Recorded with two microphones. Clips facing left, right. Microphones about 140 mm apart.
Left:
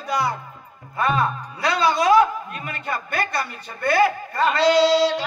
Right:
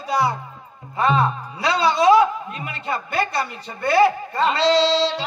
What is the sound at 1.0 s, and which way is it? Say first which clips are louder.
Speech: right 2 dB; 25° right (ahead or behind).